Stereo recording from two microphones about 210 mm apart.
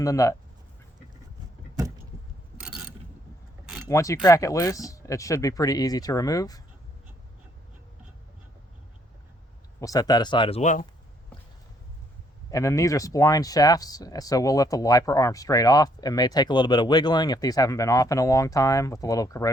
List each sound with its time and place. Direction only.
0.0 s speech: 15° left (ahead or behind)
2.6 s mechanisms: 5° right (ahead or behind)
3.8 s speech: 15° left (ahead or behind)
9.8 s speech: 15° left (ahead or behind); by 10.8 s 35° left (ahead or behind)
12.5 s speech: 15° left (ahead or behind)